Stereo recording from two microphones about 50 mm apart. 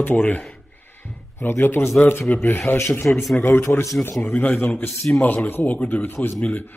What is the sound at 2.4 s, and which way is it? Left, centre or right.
Speech, left.